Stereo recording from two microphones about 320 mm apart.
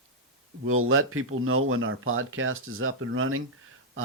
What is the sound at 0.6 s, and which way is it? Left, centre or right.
Speech, right.